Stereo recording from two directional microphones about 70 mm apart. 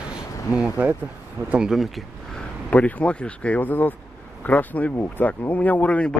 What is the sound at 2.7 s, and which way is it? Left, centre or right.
Speech, left.